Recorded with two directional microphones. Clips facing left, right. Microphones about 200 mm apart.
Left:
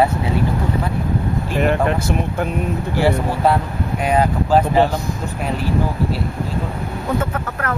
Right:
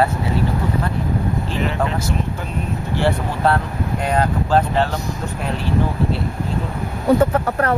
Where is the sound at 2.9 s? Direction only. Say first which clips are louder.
Left 2 dB; 10° left (ahead or behind).